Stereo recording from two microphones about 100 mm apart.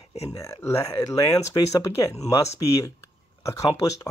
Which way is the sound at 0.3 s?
35° left (ahead or behind).